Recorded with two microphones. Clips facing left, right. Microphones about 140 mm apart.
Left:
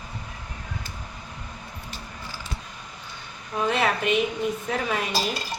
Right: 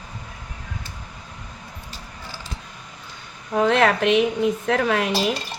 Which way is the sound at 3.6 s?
70° right (ahead or behind).